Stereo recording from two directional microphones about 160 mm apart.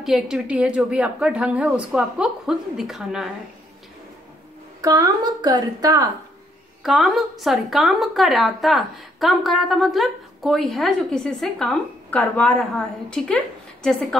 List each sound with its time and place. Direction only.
0.0 s a woman's voice: 5° right (ahead or behind)
4.8 s a woman's voice: 20° right (ahead or behind)
6.8 s a woman's voice: centre (ahead or behind)